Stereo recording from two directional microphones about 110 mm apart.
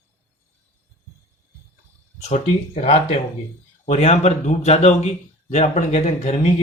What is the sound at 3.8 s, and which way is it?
A man's voice, 90° left.